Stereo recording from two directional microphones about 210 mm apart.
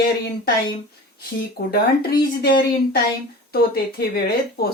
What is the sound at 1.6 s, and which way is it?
Speech, 45° left (ahead or behind).